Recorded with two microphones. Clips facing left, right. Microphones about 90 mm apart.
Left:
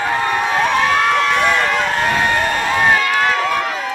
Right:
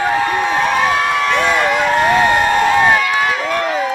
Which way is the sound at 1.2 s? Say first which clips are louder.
Right 1 dB; 5° right (ahead or behind).